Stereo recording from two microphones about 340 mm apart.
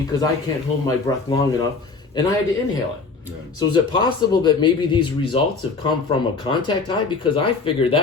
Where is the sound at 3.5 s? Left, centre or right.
Centre.